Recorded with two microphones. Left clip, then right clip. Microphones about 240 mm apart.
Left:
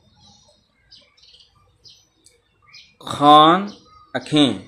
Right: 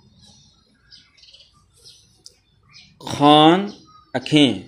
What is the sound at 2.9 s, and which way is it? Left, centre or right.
Speech, centre.